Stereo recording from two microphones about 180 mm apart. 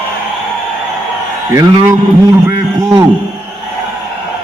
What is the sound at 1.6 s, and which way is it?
Speech, 20° right (ahead or behind).